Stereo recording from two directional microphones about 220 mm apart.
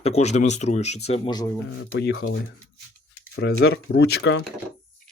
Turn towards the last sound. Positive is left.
turn(degrees=50)  # may be behind; listen again after turning